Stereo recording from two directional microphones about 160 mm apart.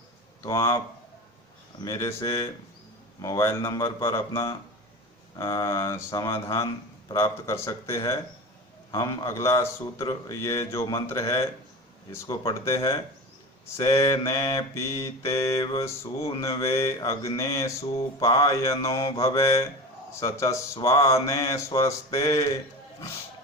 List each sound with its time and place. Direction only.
0.4 s speech: 15° left (ahead or behind)
1.8 s mantra: 20° left (ahead or behind)
4.0 s speech: 20° left (ahead or behind)
7.1 s mantra: 20° left (ahead or behind)
12.1 s speech: 15° left (ahead or behind)
12.5 s mantra: 20° left (ahead or behind)